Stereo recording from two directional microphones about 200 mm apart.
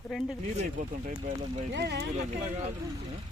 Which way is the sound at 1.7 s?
60° right (ahead or behind).